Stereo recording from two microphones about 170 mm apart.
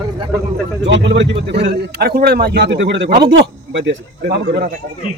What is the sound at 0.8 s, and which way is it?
A man's voice, 90° right.